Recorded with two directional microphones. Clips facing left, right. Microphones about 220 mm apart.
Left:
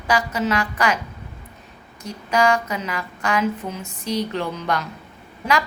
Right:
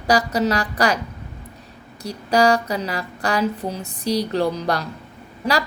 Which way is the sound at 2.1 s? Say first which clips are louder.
Right 2 dB; 35° right (ahead or behind).